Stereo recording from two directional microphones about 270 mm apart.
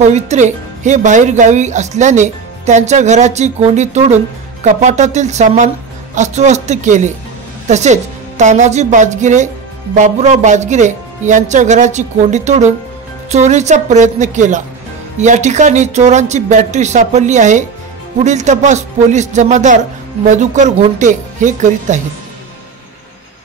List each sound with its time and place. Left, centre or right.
0.0 s speech: right